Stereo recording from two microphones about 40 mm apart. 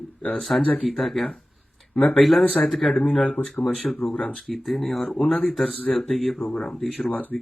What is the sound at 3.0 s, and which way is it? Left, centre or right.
Speech, left.